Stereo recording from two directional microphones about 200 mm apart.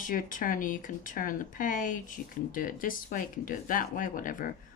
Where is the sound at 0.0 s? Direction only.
40° left (ahead or behind).